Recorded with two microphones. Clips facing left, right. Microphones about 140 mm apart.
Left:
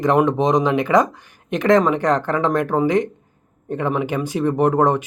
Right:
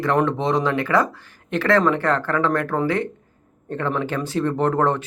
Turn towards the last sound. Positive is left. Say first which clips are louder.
# left 3 dB
turn(degrees=15)  # may be behind; listen again after turning